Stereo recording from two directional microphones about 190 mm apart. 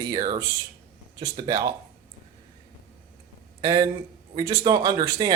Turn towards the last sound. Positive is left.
turn(degrees=-20)  # may be behind; listen again after turning